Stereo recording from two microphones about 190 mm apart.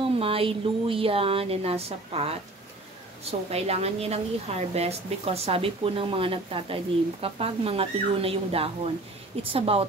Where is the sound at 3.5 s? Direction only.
35° right (ahead or behind).